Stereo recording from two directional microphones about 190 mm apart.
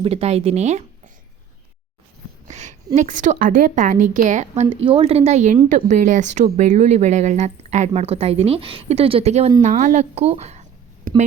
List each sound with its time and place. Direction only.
0.0 s a woman's voice: 30° right (ahead or behind)
2.5 s a woman's voice: 40° right (ahead or behind)